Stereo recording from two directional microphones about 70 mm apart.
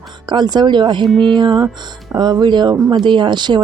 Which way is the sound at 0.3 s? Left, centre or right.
Right.